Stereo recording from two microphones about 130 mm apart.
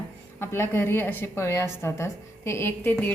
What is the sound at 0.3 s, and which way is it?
A woman's voice, 20° left (ahead or behind).